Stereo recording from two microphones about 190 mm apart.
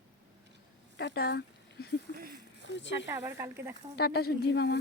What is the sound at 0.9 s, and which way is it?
Speech, 60° left (ahead or behind).